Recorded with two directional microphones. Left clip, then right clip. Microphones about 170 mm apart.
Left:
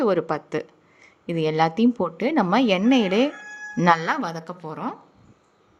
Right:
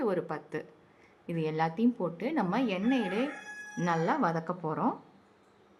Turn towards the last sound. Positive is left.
turn(degrees=0)  # may be behind; listen again after turning